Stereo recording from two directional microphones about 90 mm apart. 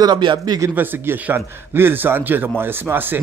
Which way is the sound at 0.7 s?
20° right (ahead or behind).